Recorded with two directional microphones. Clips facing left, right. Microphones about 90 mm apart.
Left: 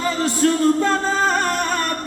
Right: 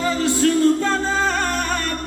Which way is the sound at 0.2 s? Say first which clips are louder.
Right 1 dB; 35° left (ahead or behind).